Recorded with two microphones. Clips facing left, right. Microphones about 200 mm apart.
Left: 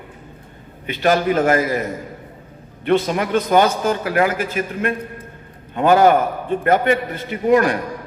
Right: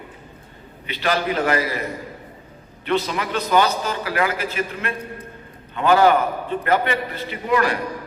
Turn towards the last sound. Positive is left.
turn(degrees=50)  # may be behind; listen again after turning